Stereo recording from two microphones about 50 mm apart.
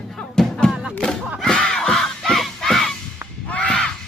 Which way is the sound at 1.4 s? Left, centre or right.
Centre.